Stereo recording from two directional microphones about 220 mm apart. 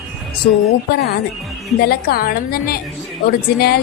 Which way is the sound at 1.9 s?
45° left (ahead or behind).